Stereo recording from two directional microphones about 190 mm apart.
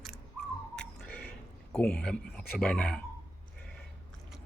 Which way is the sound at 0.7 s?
5° left (ahead or behind).